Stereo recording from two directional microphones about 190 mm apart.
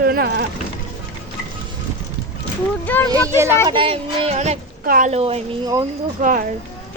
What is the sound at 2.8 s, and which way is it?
Speech, 10° left (ahead or behind).